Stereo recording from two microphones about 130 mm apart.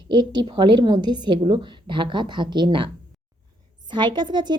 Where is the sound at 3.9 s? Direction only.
35° right (ahead or behind).